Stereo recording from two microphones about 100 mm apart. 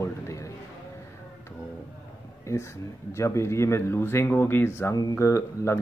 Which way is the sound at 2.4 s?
30° left (ahead or behind).